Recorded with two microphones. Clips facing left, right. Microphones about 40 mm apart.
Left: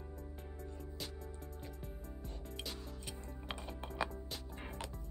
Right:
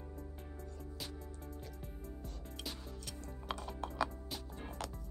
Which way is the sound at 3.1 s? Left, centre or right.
Left.